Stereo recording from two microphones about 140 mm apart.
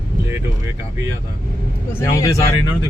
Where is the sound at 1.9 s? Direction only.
20° left (ahead or behind).